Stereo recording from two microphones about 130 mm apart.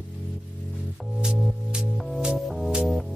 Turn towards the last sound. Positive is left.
turn(degrees=-5)  # may be behind; listen again after turning